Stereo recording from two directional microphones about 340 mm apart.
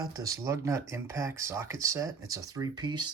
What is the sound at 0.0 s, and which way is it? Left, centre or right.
Speech, centre.